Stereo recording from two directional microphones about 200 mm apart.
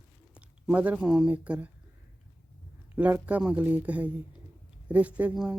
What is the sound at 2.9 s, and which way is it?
Speech, 10° right (ahead or behind).